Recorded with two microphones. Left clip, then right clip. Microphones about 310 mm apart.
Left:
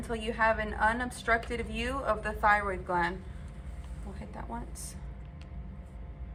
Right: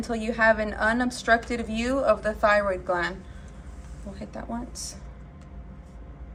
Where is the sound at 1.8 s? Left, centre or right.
Centre.